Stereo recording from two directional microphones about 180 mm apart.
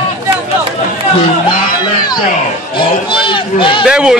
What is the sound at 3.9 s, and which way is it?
Speech, 5° right (ahead or behind).